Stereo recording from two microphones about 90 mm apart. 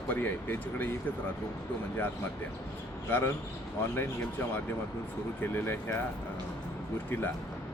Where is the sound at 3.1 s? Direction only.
25° left (ahead or behind).